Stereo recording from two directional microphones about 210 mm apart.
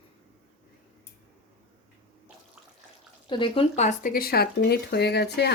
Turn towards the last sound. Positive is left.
turn(degrees=50)  # may be behind; listen again after turning